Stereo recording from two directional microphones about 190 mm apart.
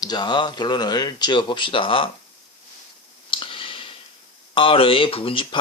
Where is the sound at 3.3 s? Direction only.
25° left (ahead or behind).